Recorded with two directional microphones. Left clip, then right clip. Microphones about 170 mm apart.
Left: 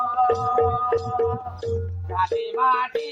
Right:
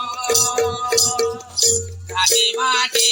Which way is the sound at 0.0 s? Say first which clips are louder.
Even; 40° right (ahead or behind).